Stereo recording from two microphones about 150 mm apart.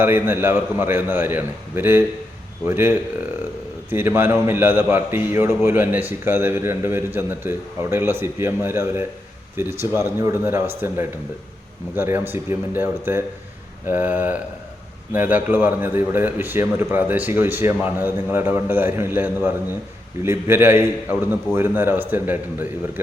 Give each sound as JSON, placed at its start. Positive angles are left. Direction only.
{"t": 0.0, "sound": "a man's voice", "side_deg": -15}